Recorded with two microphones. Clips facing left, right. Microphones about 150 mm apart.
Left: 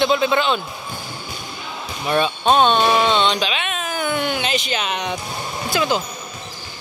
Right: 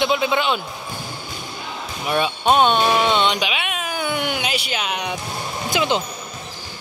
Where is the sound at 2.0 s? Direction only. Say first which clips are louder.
Left 1 dB; 10° right (ahead or behind).